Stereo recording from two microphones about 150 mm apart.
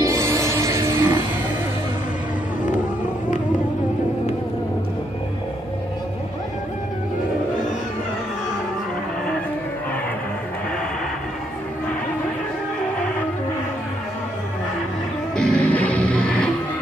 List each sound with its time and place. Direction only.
0.0 s music: 20° right (ahead or behind)
15.3 s music: 5° left (ahead or behind)